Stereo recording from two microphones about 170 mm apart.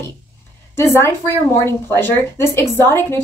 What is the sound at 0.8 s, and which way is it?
A woman's voice, 15° left (ahead or behind).